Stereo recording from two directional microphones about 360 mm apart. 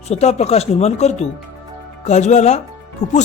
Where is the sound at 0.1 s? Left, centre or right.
Centre.